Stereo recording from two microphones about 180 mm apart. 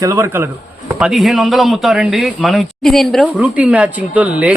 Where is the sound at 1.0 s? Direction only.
Centre (ahead or behind).